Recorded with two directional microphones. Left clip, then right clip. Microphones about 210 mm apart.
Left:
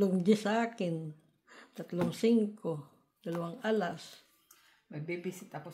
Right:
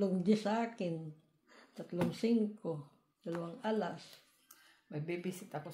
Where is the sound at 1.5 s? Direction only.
40° left (ahead or behind).